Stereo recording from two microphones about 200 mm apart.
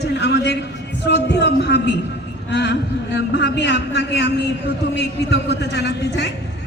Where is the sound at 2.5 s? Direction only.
60° left (ahead or behind).